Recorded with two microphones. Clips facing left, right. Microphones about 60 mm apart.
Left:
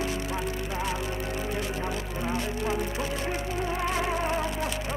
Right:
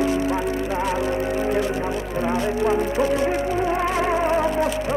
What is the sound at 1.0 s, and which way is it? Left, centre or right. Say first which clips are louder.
Music: right 10 dB; right.